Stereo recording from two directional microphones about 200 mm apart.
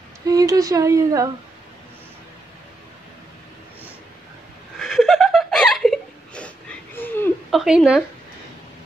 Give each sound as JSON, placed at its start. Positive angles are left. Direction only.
{"t": 0.3, "sound": "speech", "side_deg": -15}
{"t": 4.7, "sound": "a sound", "side_deg": 0}
{"t": 7.5, "sound": "a woman's voice", "side_deg": -5}